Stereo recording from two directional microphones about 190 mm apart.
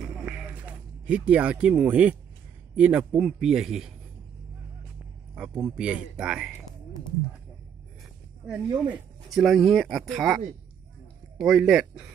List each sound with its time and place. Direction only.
0.2 s a sound: 5° right (ahead or behind)
1.0 s speech: 5° right (ahead or behind)
5.8 s speech: 5° right (ahead or behind)
8.7 s speech: 5° right (ahead or behind)